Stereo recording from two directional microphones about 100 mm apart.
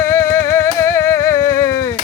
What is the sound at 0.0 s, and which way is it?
Music, 30° left (ahead or behind).